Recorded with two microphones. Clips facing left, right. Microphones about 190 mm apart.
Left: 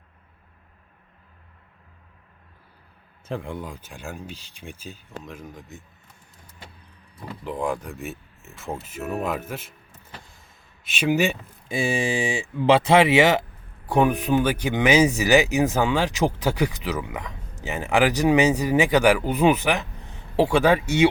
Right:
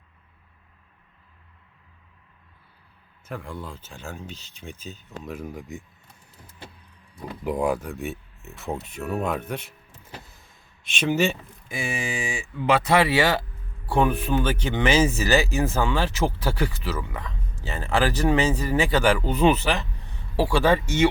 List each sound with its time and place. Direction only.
3.2 s speech: 25° left (ahead or behind)
5.2 s speech: 10° right (ahead or behind)
7.4 s speech: 10° right (ahead or behind)
10.8 s speech: 10° left (ahead or behind)
11.7 s speech: 30° left (ahead or behind); by 21.1 s 10° left (ahead or behind)